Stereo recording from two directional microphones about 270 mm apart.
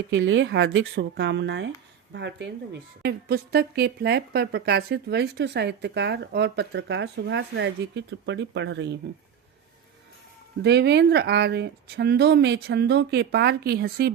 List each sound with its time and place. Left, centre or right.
0.1 s speech: right
10.6 s speech: right